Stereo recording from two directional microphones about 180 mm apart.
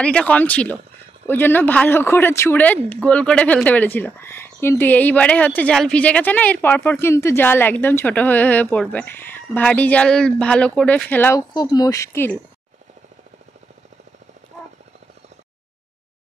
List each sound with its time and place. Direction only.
0.0 s speech: 5° left (ahead or behind)